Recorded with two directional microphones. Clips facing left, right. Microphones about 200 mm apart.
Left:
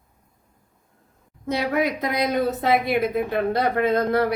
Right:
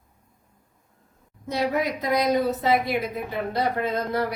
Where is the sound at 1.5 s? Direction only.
65° left (ahead or behind).